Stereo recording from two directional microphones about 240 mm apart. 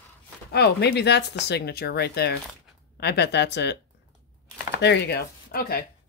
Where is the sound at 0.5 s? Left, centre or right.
Left.